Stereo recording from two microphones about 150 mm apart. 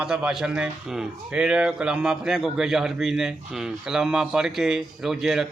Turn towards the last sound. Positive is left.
turn(degrees=0)  # may be behind; listen again after turning